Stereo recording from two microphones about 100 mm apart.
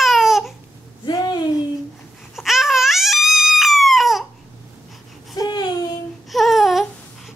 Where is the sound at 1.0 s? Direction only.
50° left (ahead or behind).